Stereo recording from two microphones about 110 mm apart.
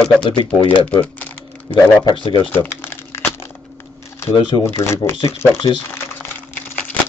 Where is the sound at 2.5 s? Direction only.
20° left (ahead or behind).